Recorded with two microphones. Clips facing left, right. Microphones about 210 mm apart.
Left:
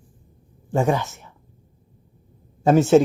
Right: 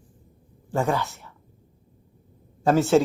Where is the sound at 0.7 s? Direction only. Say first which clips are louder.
Left 3 dB; 15° left (ahead or behind).